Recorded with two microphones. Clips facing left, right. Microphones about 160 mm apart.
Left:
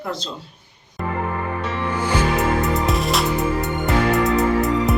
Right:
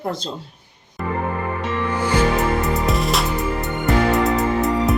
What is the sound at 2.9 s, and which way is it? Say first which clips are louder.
Music: left 1 dB; centre (ahead or behind).